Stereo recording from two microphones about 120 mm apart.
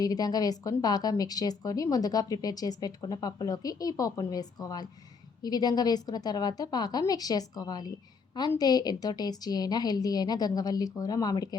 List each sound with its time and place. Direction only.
0.0 s a woman's voice: 30° left (ahead or behind)